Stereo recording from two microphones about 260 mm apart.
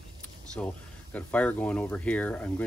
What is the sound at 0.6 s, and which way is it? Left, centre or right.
Speech, centre.